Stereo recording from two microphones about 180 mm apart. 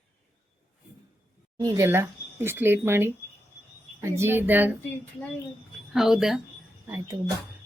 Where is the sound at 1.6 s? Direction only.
20° right (ahead or behind).